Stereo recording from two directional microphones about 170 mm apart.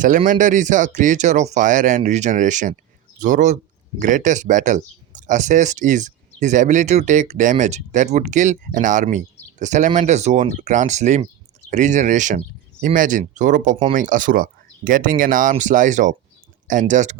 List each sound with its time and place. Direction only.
0.3 s speech: 50° right (ahead or behind)